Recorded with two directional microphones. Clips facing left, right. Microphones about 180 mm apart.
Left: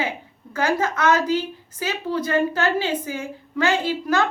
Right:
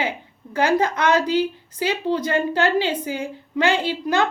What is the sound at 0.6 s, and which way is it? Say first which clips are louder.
A woman's voice: right 2 dB; 20° right (ahead or behind).